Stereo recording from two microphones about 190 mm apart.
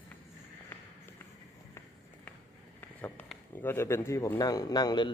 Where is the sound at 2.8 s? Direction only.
10° left (ahead or behind).